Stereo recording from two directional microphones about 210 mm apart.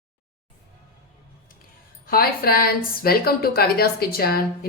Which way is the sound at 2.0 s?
45° left (ahead or behind).